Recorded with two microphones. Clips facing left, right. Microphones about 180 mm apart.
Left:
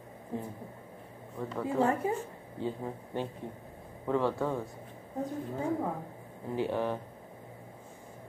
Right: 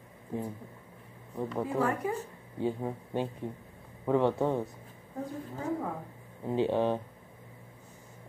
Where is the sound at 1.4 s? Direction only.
15° right (ahead or behind).